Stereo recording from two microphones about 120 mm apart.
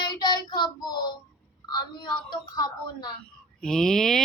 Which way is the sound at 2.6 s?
35° left (ahead or behind).